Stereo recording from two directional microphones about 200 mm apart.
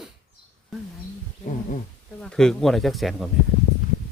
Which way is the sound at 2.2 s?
5° left (ahead or behind).